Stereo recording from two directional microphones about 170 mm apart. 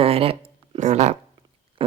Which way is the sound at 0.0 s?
35° right (ahead or behind).